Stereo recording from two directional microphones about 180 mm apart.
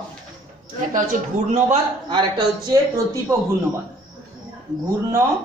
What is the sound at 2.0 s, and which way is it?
Speech, 25° right (ahead or behind).